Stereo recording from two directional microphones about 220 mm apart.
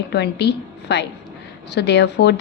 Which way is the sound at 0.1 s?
50° left (ahead or behind).